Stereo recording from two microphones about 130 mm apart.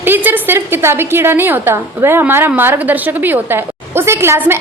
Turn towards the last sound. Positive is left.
turn(degrees=-20)  # may be behind; listen again after turning